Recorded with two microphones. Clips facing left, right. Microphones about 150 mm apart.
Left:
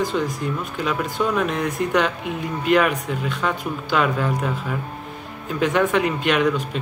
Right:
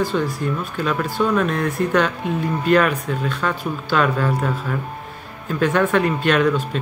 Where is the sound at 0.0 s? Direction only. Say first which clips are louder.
Right 2 dB; 15° left (ahead or behind).